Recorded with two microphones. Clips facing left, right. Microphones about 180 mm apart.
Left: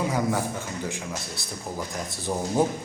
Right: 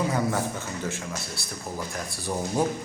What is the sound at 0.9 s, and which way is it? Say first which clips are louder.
Speech: even; 15° left (ahead or behind).